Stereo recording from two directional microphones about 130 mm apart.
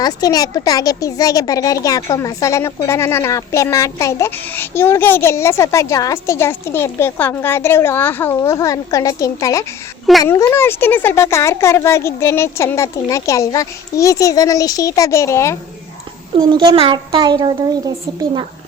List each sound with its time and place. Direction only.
0.0 s speech: 30° left (ahead or behind)
16.4 s a child's voice: 35° right (ahead or behind)